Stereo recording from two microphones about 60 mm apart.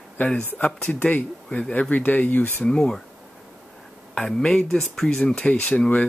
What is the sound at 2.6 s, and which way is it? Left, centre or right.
Speech, centre.